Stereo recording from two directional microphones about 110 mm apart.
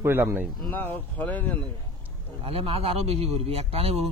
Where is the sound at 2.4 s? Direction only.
60° right (ahead or behind).